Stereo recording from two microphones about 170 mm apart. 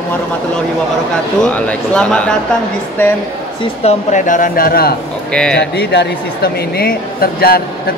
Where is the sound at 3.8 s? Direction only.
50° left (ahead or behind).